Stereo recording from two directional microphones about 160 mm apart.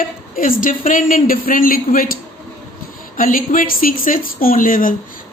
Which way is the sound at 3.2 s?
60° left (ahead or behind).